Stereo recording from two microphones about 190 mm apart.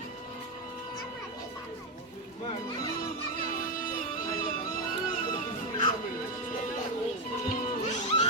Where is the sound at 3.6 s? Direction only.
45° left (ahead or behind).